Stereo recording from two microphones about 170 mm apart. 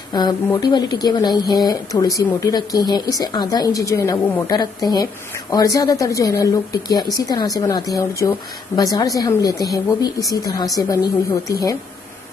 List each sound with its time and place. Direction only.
0.1 s speech: 25° left (ahead or behind)